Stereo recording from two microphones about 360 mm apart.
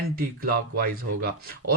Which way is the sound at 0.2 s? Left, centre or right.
Right.